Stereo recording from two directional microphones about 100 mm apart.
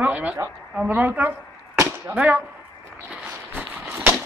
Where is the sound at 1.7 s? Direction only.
30° right (ahead or behind).